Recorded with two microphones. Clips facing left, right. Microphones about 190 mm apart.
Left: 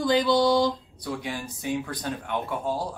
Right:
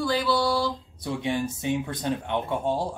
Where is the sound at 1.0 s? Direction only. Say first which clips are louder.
Right 5 dB; 25° right (ahead or behind).